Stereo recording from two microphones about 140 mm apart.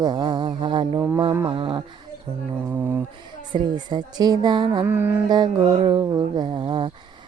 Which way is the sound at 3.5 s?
30° right (ahead or behind).